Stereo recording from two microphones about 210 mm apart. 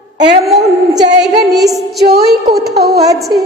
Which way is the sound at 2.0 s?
50° right (ahead or behind).